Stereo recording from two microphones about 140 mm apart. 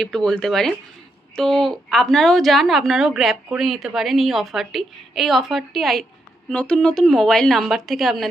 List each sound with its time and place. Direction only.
0.0 s a woman's voice: 5° left (ahead or behind)